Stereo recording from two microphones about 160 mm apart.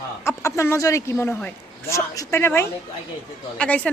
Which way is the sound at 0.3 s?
15° left (ahead or behind).